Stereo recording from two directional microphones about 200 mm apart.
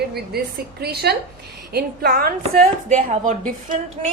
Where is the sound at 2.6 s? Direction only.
35° right (ahead or behind).